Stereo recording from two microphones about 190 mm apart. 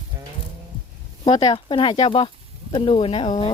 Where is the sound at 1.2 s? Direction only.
20° left (ahead or behind).